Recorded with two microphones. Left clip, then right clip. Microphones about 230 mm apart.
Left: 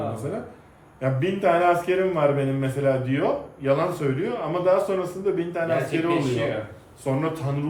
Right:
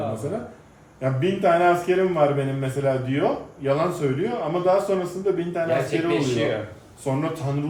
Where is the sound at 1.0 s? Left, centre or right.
Centre.